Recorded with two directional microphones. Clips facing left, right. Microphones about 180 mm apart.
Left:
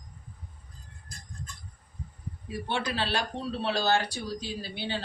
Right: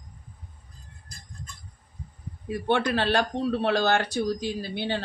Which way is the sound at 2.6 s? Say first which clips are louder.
Right 7 dB; 55° right (ahead or behind).